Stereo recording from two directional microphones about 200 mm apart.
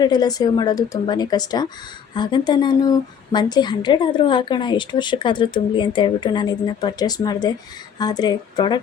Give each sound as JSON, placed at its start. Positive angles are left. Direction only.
{"t": 0.0, "sound": "a woman's voice", "side_deg": 20}